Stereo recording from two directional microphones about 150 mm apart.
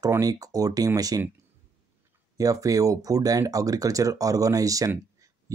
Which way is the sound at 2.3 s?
25° right (ahead or behind).